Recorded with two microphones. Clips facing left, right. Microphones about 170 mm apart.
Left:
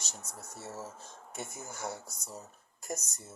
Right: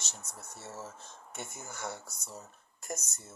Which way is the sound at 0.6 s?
10° left (ahead or behind).